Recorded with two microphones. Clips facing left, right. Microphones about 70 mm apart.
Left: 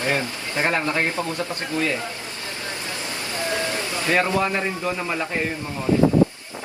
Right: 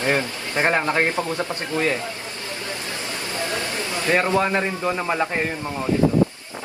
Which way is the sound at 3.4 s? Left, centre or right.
Left.